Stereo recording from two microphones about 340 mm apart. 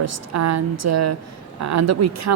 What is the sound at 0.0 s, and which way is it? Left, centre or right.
Speech, right.